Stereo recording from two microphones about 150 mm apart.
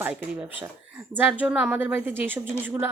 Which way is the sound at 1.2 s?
10° right (ahead or behind).